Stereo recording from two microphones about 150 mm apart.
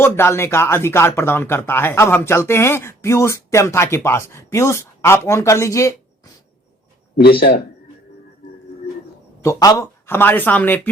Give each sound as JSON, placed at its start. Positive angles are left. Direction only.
{"t": 0.0, "sound": "speech", "side_deg": 15}
{"t": 7.2, "sound": "speech", "side_deg": 90}
{"t": 9.4, "sound": "speech", "side_deg": 20}
{"t": 10.1, "sound": "speech", "side_deg": 15}